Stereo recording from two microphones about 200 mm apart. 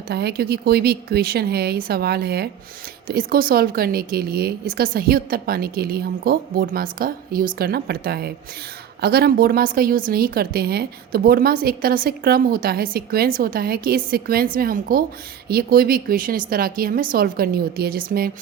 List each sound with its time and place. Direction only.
0.1 s a woman's voice: 55° right (ahead or behind)